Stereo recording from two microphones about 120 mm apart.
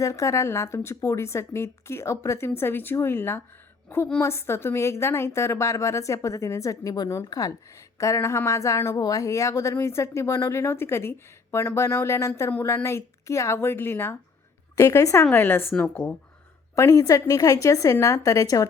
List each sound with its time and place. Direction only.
0.0 s a woman's voice: 25° left (ahead or behind)
16.7 s a woman's voice: 25° left (ahead or behind)